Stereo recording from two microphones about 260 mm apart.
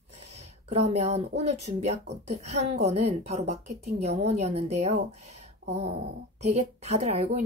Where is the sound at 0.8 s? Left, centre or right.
Right.